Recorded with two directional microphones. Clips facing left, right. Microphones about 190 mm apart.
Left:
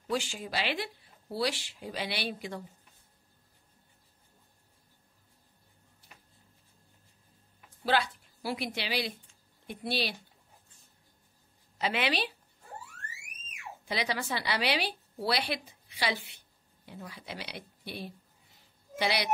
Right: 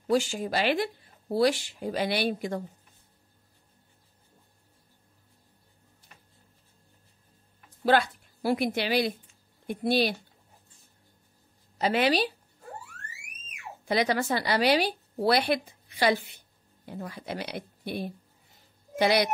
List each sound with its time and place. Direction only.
0.1 s speech: 45° right (ahead or behind)
7.8 s a woman's voice: 50° right (ahead or behind)
11.8 s a woman's voice: 40° right (ahead or behind)
13.8 s a woman's voice: 50° right (ahead or behind)